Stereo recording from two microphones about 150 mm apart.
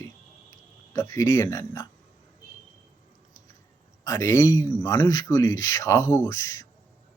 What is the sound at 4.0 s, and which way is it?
Speech, 20° left (ahead or behind).